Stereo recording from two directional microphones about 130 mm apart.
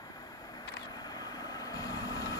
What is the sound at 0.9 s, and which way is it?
Vehicle, 30° left (ahead or behind).